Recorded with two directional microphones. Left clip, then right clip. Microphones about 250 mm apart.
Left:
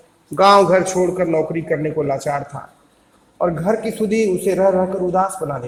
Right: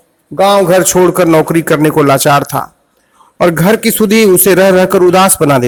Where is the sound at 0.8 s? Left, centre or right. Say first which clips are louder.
Right 10 dB; right.